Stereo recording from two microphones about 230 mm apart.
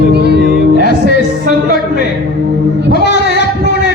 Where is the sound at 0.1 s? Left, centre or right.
Right.